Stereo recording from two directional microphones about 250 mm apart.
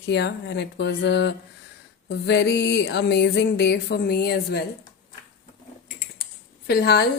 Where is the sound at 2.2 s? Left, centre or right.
Left.